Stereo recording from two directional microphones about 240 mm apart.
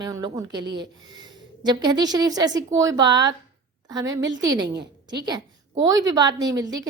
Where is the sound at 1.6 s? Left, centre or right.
Centre.